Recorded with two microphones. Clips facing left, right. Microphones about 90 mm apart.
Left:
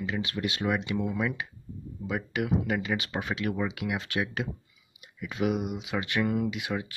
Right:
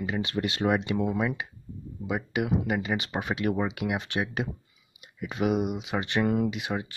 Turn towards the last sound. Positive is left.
turn(degrees=-30)  # may be behind; listen again after turning